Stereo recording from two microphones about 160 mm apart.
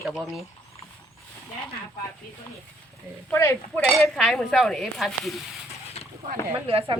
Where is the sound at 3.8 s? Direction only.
Centre (ahead or behind).